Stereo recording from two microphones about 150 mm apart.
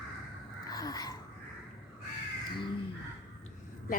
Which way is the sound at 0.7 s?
25° left (ahead or behind).